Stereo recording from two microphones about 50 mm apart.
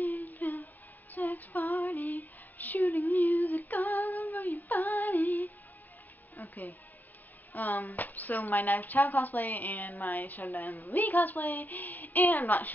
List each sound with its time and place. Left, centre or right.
0.0 s humming: left
1.1 s female singing: left
2.0 s a sound: left
2.9 s female singing: left
3.2 s female singing: left
6.3 s music: left
7.5 s a woman's voice: left